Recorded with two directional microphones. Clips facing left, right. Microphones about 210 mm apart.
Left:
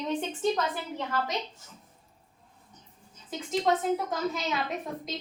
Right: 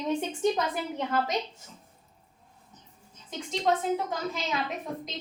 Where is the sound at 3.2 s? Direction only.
Centre (ahead or behind).